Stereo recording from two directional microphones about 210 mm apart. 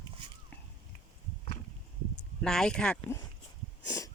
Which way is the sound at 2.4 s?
Centre (ahead or behind).